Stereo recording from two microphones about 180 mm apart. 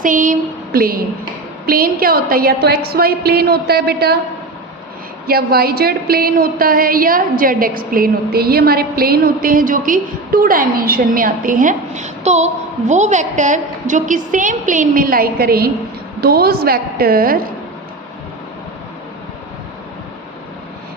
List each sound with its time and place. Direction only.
0.0 s a sound: 45° right (ahead or behind)
1.6 s a woman's voice: 55° right (ahead or behind)
5.3 s a woman's voice: 60° right (ahead or behind)